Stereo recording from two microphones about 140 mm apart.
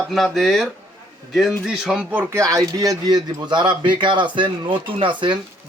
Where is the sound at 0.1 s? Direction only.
Centre (ahead or behind).